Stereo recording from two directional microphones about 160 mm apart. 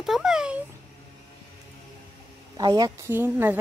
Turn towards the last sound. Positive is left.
turn(degrees=-15)  # may be behind; listen again after turning